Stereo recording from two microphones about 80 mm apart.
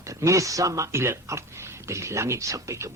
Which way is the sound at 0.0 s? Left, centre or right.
Right.